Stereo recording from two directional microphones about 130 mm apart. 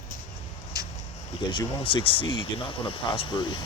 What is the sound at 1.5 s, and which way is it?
Speech, 40° left (ahead or behind).